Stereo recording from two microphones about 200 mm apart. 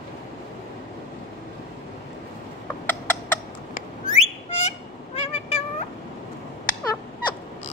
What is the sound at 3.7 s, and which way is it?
Whistling, 35° left (ahead or behind).